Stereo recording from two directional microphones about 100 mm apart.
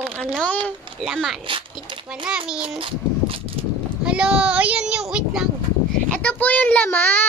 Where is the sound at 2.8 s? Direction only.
65° right (ahead or behind).